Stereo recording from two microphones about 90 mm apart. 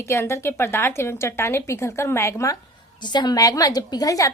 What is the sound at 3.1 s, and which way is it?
A woman's voice, 50° left (ahead or behind).